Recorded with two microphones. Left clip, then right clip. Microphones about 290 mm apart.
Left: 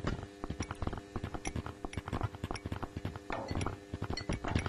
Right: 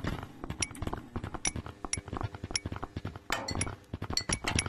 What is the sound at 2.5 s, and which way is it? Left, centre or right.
Chink, right.